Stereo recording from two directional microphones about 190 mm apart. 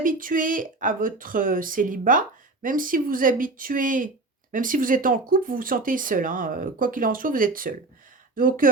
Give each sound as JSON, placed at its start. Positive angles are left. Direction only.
{"t": 0.0, "sound": "speech", "side_deg": -45}